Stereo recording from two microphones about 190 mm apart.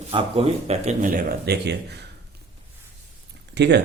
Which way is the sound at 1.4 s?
60° right (ahead or behind).